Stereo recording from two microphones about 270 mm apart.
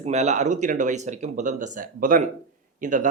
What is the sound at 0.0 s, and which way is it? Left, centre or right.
Speech, right.